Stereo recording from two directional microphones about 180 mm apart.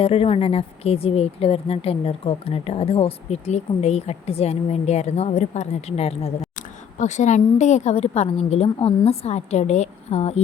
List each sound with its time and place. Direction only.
0.0 s speech: 30° left (ahead or behind)